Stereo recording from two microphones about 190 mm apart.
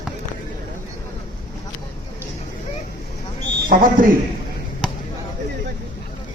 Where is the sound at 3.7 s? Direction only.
45° right (ahead or behind).